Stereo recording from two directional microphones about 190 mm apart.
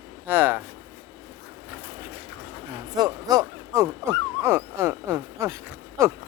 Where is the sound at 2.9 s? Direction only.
20° right (ahead or behind).